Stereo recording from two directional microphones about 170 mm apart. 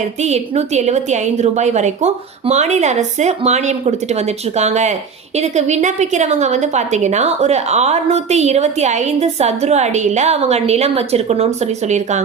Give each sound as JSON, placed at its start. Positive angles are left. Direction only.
{"t": 0.2, "sound": "a woman's voice", "side_deg": -40}